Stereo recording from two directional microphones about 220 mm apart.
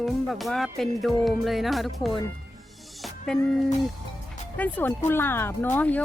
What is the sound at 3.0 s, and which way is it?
Music, 5° left (ahead or behind).